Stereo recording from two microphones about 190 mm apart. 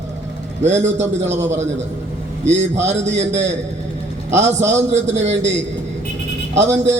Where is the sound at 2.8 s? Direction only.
35° right (ahead or behind).